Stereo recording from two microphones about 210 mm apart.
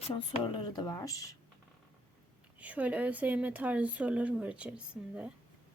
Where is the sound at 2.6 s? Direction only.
5° right (ahead or behind).